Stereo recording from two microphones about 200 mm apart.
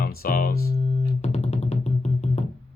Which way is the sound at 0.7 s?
30° left (ahead or behind).